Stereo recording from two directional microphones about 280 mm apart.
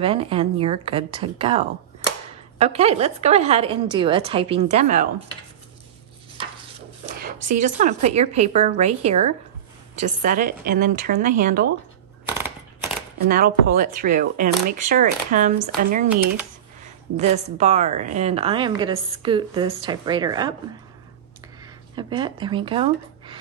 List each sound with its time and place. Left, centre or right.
0.0 s speech: centre
7.2 s speech: right
13.3 s a woman's voice: right; by 20.5 s centre
21.9 s speech: centre